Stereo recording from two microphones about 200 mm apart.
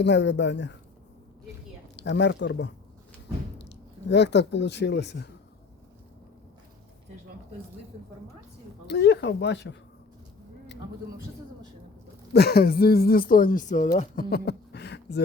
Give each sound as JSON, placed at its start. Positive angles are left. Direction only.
{"t": 0.0, "sound": "speech", "side_deg": 60}
{"t": 2.0, "sound": "speech", "side_deg": 60}
{"t": 8.9, "sound": "speech", "side_deg": 60}
{"t": 12.3, "sound": "speech", "side_deg": 55}